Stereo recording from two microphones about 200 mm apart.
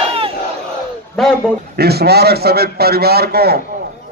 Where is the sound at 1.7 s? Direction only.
55° right (ahead or behind).